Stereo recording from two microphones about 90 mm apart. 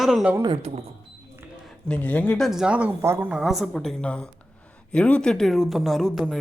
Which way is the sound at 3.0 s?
30° right (ahead or behind).